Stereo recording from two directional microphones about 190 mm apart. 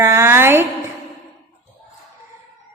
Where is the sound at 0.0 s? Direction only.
15° right (ahead or behind).